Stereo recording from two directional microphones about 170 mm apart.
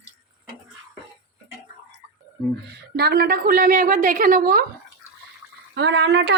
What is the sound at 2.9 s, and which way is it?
A woman's voice, 65° right (ahead or behind).